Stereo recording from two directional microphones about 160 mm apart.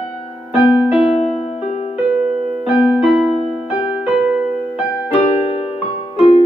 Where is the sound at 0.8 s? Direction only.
5° right (ahead or behind).